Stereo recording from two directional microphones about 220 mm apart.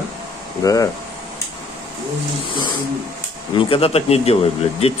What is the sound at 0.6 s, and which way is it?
Speech, 15° left (ahead or behind).